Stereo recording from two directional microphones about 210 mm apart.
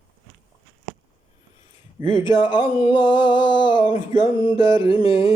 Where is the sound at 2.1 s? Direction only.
20° left (ahead or behind).